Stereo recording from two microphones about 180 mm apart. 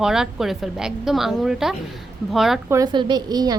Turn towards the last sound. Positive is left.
turn(degrees=-20)  # may be behind; listen again after turning